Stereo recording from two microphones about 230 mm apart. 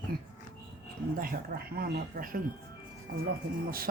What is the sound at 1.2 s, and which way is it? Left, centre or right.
Speech, right.